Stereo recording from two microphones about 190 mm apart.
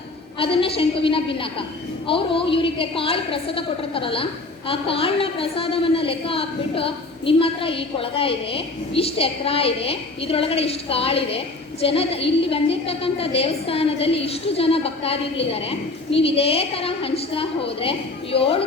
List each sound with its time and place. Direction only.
0.3 s a woman's voice: 30° left (ahead or behind)